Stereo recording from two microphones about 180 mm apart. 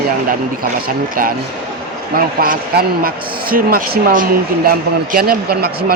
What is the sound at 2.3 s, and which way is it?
Speech, 55° right (ahead or behind).